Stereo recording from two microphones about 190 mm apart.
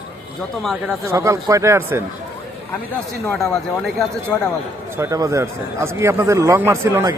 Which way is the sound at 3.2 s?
Centre (ahead or behind).